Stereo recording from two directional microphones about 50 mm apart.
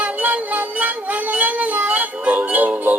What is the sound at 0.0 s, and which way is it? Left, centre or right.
Music, right.